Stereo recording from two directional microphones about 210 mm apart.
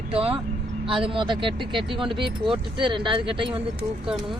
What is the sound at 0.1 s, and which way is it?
Speech, 25° right (ahead or behind).